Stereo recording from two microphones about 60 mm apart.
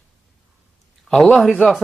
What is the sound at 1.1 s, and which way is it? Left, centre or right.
Speech, centre.